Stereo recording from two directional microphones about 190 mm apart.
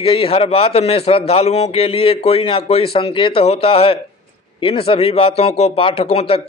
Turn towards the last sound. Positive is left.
turn(degrees=30)  # may be behind; listen again after turning